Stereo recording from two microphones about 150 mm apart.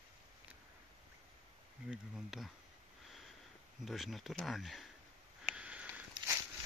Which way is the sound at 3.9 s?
Centre (ahead or behind).